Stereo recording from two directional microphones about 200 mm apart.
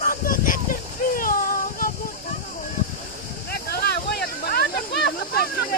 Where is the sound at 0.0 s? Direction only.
45° left (ahead or behind).